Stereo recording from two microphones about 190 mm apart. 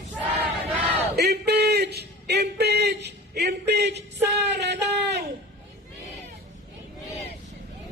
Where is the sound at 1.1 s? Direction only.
55° right (ahead or behind).